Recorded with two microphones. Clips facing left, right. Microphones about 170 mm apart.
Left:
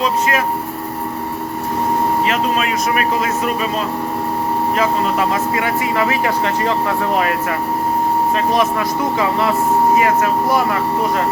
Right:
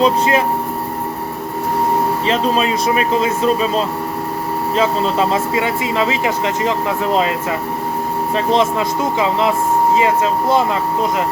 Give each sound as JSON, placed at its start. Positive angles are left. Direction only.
{"t": 0.0, "sound": "speech", "side_deg": -25}
{"t": 2.2, "sound": "speech", "side_deg": -30}
{"t": 4.8, "sound": "speech", "side_deg": -25}
{"t": 9.1, "sound": "speech", "side_deg": -20}